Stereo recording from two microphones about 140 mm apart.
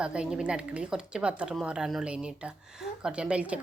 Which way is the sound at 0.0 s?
5° right (ahead or behind).